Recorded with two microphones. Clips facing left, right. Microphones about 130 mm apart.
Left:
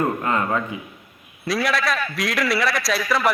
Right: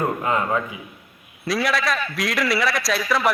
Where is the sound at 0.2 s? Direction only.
15° right (ahead or behind).